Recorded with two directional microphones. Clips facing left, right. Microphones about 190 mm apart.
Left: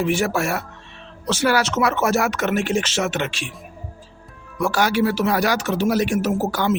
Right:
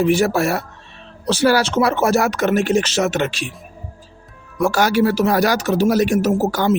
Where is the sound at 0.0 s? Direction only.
35° right (ahead or behind).